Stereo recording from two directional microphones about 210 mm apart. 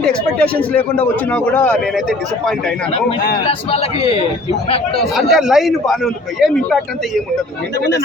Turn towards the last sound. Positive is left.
turn(degrees=0)  # may be behind; listen again after turning